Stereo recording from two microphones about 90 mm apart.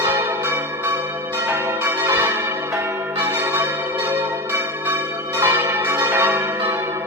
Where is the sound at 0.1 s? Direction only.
25° right (ahead or behind).